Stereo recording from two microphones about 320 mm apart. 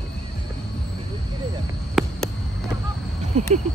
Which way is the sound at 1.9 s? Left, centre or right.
Centre.